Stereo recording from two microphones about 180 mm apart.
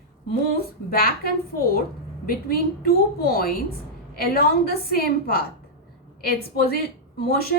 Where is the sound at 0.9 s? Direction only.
60° left (ahead or behind).